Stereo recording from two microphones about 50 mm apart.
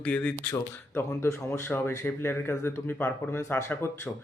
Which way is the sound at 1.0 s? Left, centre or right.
Left.